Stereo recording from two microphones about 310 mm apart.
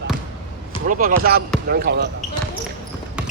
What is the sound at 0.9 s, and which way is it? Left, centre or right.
Speech, right.